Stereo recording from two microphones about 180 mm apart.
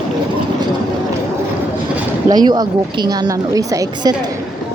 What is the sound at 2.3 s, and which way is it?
A woman's voice, 20° right (ahead or behind).